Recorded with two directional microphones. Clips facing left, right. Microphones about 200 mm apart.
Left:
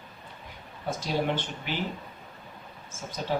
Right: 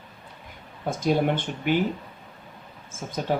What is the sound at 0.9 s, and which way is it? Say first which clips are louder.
Speech: right 6 dB; 50° right (ahead or behind).